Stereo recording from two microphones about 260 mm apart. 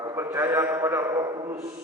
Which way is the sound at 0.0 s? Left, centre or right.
Centre.